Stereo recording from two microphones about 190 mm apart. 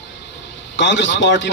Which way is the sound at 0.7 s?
70° left (ahead or behind).